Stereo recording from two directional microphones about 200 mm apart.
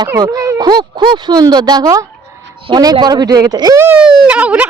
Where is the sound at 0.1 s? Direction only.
20° right (ahead or behind).